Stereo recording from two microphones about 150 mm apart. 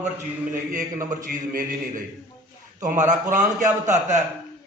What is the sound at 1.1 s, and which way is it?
Speech, 60° right (ahead or behind).